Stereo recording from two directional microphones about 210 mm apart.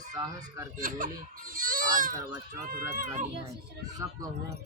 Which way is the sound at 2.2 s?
15° right (ahead or behind).